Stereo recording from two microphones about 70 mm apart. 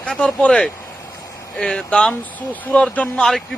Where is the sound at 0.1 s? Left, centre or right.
Centre.